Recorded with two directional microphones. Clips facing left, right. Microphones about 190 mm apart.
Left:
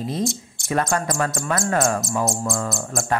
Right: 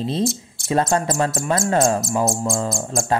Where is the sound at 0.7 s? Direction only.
25° right (ahead or behind).